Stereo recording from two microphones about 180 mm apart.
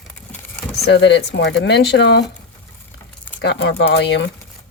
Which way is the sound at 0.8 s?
70° left (ahead or behind).